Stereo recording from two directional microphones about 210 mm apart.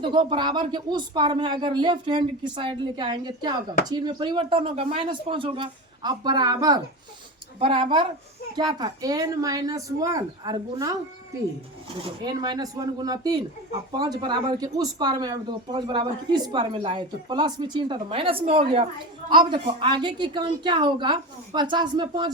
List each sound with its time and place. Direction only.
0.0 s speech: 25° right (ahead or behind)
12.2 s speech: 20° right (ahead or behind)